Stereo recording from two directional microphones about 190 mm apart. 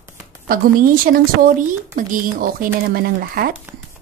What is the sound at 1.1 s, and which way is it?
Speech, 45° right (ahead or behind).